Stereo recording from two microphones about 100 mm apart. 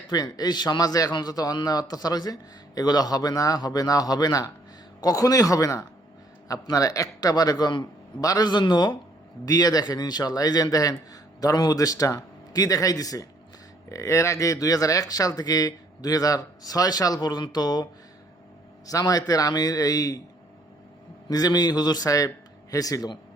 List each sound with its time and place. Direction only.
0.1 s a man's voice: 45° left (ahead or behind)
18.9 s a man's voice: 35° left (ahead or behind)
21.2 s a man's voice: 40° left (ahead or behind)